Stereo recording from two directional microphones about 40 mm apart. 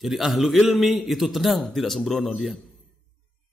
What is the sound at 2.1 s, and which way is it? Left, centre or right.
Speech, centre.